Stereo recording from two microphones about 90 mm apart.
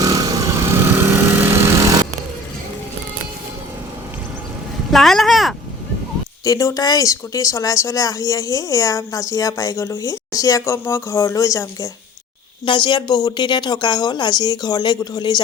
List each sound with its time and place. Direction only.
0.0 s lawn mower: 45° right (ahead or behind)
0.6 s lawn mower: 30° right (ahead or behind)
1.8 s a sound: 40° right (ahead or behind)
4.9 s a sound: 5° left (ahead or behind)
6.4 s speech: 35° left (ahead or behind)
12.6 s speech: 65° left (ahead or behind)